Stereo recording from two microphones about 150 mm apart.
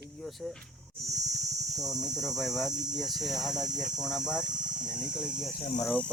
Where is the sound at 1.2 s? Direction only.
50° right (ahead or behind).